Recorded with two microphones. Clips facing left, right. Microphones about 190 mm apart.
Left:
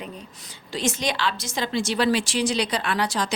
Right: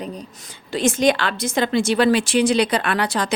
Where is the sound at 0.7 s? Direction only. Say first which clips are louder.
Right 8 dB; 50° right (ahead or behind).